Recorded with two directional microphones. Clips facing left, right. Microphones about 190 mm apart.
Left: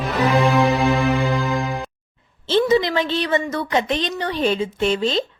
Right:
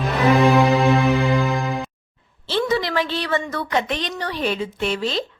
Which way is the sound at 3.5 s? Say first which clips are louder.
Left 2 dB; 20° left (ahead or behind).